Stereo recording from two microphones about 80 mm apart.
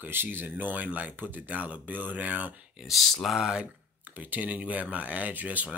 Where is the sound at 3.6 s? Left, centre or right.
Right.